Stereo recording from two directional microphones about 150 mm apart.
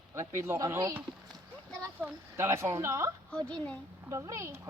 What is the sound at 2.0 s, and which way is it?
Speech, 20° right (ahead or behind).